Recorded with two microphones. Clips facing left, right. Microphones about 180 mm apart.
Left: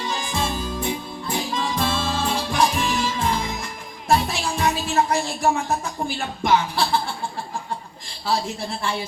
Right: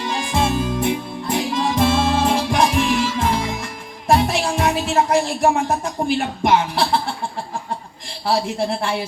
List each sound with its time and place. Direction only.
0.0 s music: 55° right (ahead or behind)
8.2 s speech: 60° right (ahead or behind)